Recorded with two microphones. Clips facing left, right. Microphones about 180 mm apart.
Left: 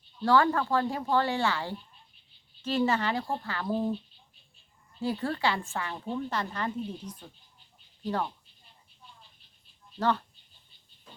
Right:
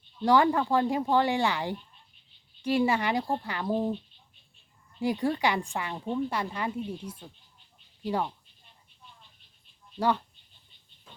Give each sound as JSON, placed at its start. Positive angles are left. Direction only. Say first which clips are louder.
{"t": 0.3, "sound": "a woman's voice", "louder": "right 2 dB", "side_deg": -15}
{"t": 4.9, "sound": "a woman's voice", "louder": "right 3 dB", "side_deg": -15}
{"t": 10.0, "sound": "a woman's voice", "louder": "right 1 dB", "side_deg": -10}